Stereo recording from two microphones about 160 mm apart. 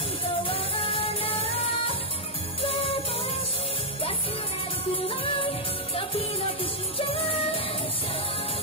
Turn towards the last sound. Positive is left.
turn(degrees=35)  # may be behind; listen again after turning